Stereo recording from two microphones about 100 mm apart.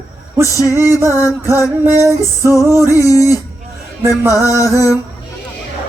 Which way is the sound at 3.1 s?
35° left (ahead or behind).